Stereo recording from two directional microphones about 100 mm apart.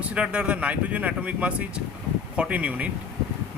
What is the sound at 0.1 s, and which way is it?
Speech, 10° right (ahead or behind).